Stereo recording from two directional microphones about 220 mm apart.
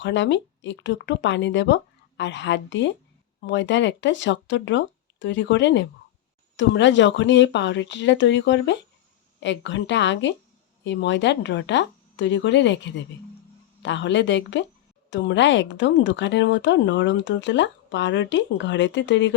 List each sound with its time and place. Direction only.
0.0 s a woman's voice: 55° left (ahead or behind)